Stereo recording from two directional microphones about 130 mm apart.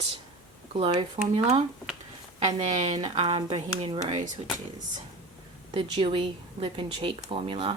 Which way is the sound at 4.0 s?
30° right (ahead or behind).